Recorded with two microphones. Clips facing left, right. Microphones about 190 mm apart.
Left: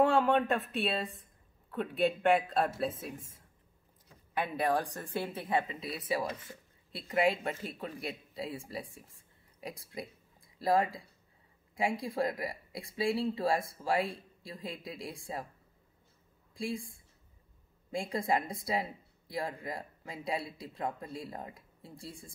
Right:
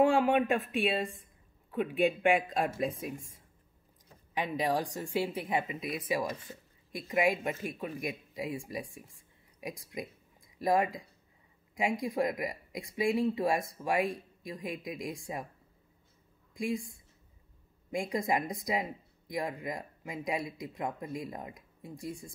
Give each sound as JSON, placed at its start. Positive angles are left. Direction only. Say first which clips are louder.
{"t": 0.2, "sound": "speech", "louder": "right 1 dB", "side_deg": -10}
{"t": 5.8, "sound": "speech", "louder": "right 3 dB", "side_deg": 35}
{"t": 6.0, "sound": "speech", "louder": "even", "side_deg": -10}
{"t": 16.5, "sound": "speech", "louder": "right 3 dB", "side_deg": -15}
{"t": 17.9, "sound": "speech", "louder": "right 1 dB", "side_deg": -15}